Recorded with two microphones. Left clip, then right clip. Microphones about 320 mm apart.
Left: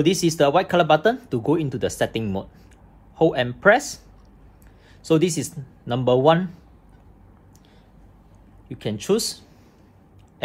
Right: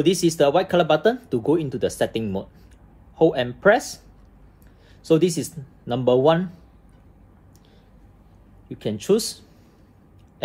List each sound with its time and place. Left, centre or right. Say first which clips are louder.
0.0 s speech: even; centre
5.0 s speech: right 1 dB; centre
8.7 s speech: right 1 dB; centre